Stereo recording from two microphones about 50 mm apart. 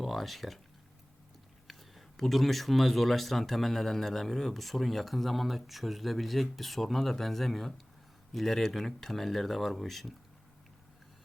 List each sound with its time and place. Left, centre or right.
0.0 s speech: centre
1.6 s speech: centre